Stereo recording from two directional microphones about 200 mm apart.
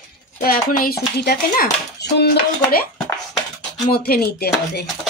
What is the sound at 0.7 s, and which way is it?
Speech, 50° left (ahead or behind).